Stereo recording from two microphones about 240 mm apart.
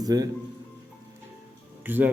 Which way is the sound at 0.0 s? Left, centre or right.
Centre.